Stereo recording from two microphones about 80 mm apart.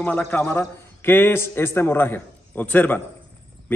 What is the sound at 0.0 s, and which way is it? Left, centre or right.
A man's voice, left.